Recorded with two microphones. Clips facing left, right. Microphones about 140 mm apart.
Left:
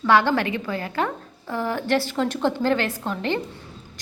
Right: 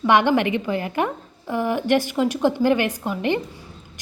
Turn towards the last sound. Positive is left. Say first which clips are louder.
# right 3 dB
turn(degrees=-15)  # may be behind; listen again after turning